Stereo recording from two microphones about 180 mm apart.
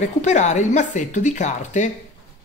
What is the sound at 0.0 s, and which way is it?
Speech, 40° left (ahead or behind).